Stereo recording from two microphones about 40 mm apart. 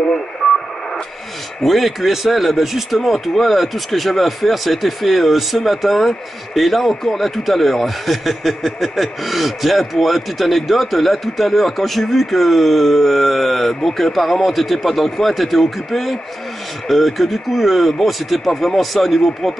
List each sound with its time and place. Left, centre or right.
1.6 s a man's voice: centre